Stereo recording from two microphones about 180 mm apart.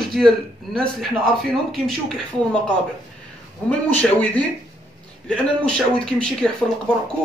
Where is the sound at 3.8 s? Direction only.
10° left (ahead or behind).